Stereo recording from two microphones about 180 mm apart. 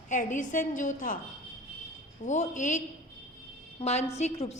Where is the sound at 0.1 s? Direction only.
45° left (ahead or behind).